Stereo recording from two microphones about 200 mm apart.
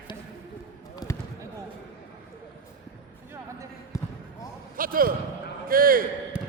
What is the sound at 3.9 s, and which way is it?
Basketball bounce, 15° left (ahead or behind).